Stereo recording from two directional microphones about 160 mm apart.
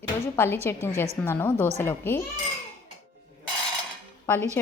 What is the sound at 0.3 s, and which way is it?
A woman's voice, 15° left (ahead or behind).